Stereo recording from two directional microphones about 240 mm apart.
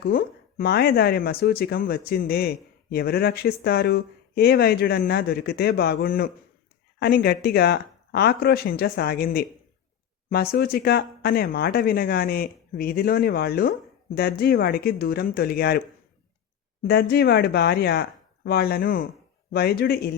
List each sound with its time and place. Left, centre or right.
0.0 s speech: left
16.8 s speech: left